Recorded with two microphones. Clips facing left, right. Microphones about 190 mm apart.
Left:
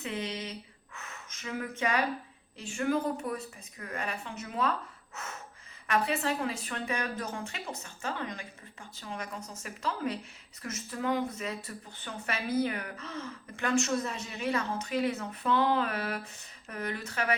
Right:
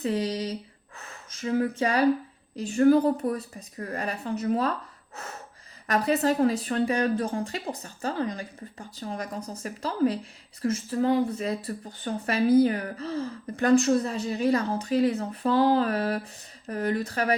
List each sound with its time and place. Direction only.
0.0 s a woman's voice: 35° right (ahead or behind)
5.1 s snort: 35° right (ahead or behind)
5.9 s a woman's voice: 40° right (ahead or behind)